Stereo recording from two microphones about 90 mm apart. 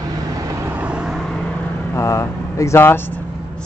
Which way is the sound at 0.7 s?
15° right (ahead or behind).